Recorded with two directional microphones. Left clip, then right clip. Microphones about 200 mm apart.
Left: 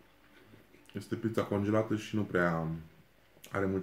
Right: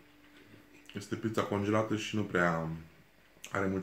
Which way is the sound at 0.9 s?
5° left (ahead or behind).